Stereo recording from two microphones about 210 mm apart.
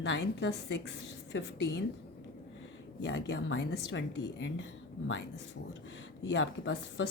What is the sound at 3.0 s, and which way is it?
A woman's voice, 60° left (ahead or behind).